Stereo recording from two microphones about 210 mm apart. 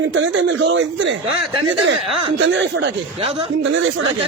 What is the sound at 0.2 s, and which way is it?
Speech, 60° right (ahead or behind).